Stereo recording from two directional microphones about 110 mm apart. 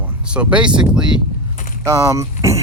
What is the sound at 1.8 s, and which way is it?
Speech, 25° right (ahead or behind).